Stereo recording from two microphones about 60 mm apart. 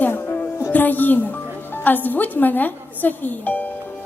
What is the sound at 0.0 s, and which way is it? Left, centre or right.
Music, left.